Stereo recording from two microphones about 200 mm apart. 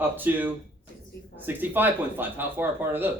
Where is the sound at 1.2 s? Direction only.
55° left (ahead or behind).